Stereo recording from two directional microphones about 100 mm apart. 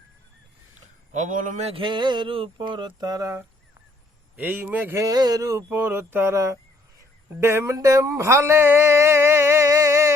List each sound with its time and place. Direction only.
1.6 s speech: 60° right (ahead or behind); by 3.4 s 35° right (ahead or behind)
4.4 s speech: 15° right (ahead or behind)
4.9 s speech: 40° right (ahead or behind)
5.6 s speech: 20° right (ahead or behind)